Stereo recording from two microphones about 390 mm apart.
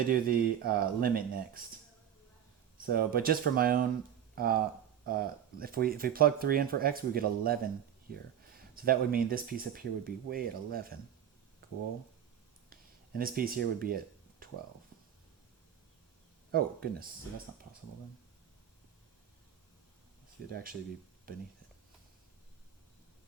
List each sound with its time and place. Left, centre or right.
0.1 s speech: right
2.8 s speech: right
8.7 s speech: right
12.7 s a sound: right
16.5 s speech: right
20.5 s speech: right